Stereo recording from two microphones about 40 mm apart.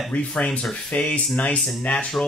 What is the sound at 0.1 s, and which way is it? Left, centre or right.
Speech, left.